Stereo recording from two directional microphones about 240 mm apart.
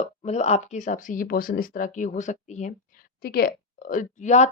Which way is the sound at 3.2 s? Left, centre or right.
Left.